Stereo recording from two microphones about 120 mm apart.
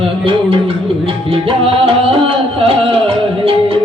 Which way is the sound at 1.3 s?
50° right (ahead or behind).